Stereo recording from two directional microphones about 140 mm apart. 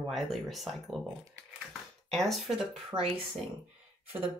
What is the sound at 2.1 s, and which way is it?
Speech, centre (ahead or behind).